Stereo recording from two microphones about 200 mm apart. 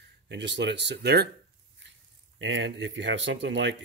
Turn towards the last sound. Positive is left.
turn(degrees=-60)  # may be behind; listen again after turning